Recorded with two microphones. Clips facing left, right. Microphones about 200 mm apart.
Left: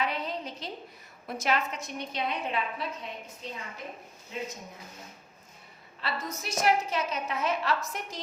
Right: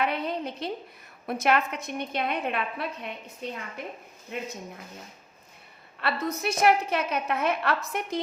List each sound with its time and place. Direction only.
0.0 s a woman's voice: 60° right (ahead or behind)
4.3 s a woman's voice: 60° right (ahead or behind)
6.0 s a woman's voice: 60° right (ahead or behind)